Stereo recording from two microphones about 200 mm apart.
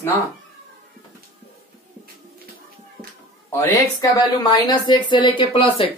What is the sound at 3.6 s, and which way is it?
Speech, 20° left (ahead or behind).